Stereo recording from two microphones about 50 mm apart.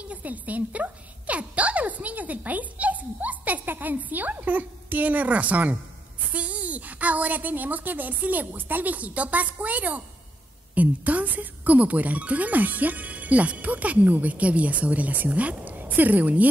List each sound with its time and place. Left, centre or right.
0.0 s a woman's voice: right